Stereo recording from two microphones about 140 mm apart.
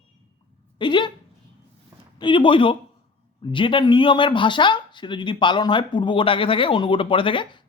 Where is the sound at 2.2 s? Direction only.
35° left (ahead or behind).